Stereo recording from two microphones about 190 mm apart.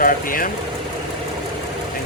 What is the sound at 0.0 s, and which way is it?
Speech, 50° left (ahead or behind).